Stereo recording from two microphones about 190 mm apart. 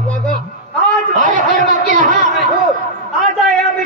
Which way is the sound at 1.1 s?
40° right (ahead or behind).